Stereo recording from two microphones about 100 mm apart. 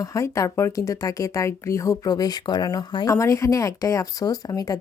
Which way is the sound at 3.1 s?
30° left (ahead or behind).